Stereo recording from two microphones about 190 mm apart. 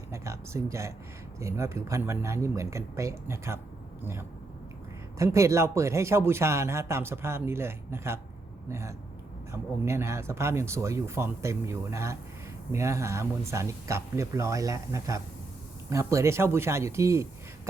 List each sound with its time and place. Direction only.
0.1 s a man's voice: 15° right (ahead or behind)